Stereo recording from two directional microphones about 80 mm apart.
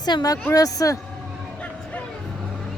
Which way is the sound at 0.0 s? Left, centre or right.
Left.